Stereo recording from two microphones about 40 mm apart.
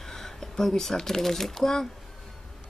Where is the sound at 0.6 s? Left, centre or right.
Centre.